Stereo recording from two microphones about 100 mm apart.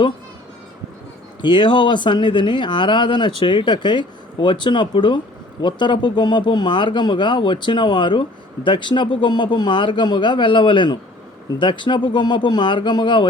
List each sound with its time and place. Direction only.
1.4 s speech: 55° left (ahead or behind)